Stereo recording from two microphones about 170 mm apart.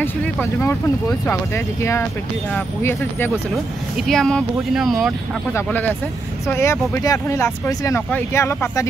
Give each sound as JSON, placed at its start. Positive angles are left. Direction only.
{"t": 0.0, "sound": "speech", "side_deg": 15}
{"t": 5.5, "sound": "speech", "side_deg": 10}